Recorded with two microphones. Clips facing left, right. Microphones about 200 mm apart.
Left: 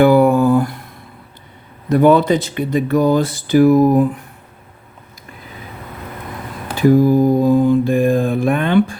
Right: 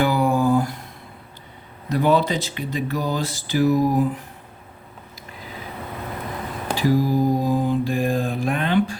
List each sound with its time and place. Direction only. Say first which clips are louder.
0.0 s a sound: left 8 dB; 55° left (ahead or behind)
1.9 s speech: left 8 dB; 55° left (ahead or behind)
6.8 s speech: left 8 dB; 55° left (ahead or behind)